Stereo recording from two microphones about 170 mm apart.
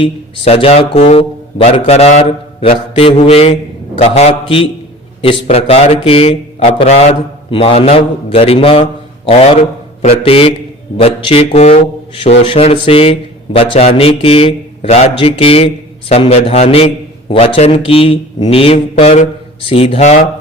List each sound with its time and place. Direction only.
0.0 s speech: 35° left (ahead or behind)